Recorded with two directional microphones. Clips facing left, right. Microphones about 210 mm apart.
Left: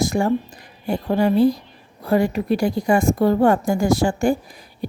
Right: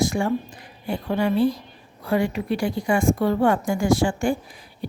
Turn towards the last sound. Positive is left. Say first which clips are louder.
# left 4 dB
turn(degrees=40)  # may be behind; listen again after turning